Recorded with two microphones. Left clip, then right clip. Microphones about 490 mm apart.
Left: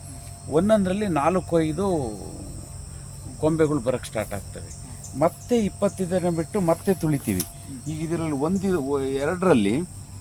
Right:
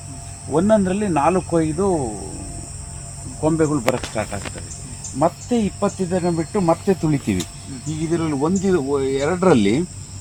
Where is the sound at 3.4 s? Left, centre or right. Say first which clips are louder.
Right 3 dB; left.